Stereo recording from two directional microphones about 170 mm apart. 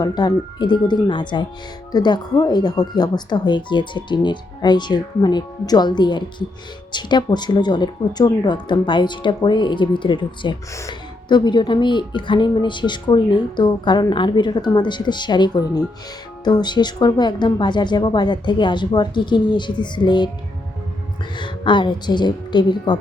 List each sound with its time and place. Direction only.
0.0 s speech: 25° left (ahead or behind)
21.3 s speech: 30° left (ahead or behind)